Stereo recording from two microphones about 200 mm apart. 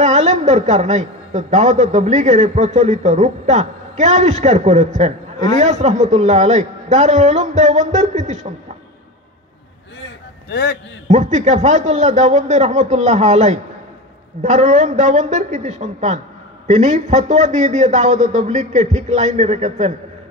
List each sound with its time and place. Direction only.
0.0 s a woman's voice: 35° right (ahead or behind)
10.5 s a man's voice: 50° left (ahead or behind)
11.1 s a woman's voice: 35° right (ahead or behind)